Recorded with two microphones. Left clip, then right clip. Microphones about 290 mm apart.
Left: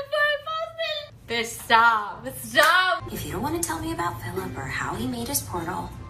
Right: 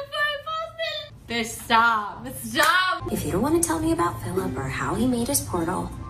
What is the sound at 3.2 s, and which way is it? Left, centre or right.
A woman's voice, centre.